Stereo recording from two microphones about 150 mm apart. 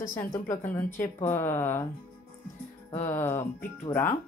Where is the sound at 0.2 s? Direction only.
20° left (ahead or behind).